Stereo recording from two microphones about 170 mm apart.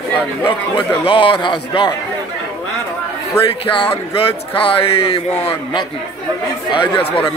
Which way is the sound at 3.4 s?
30° left (ahead or behind).